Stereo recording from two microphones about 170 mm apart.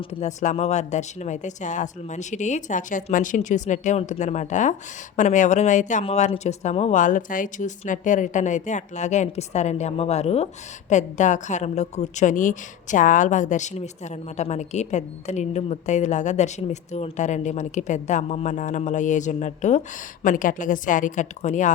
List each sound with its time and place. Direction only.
0.0 s speech: 40° left (ahead or behind)